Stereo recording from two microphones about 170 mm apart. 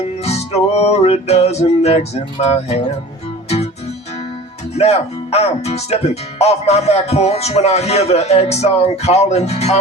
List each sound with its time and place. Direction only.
0.2 s speech: 40° left (ahead or behind)
4.7 s speech: 40° left (ahead or behind)